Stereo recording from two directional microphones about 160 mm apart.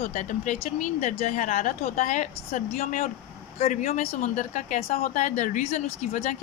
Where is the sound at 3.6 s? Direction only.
40° left (ahead or behind).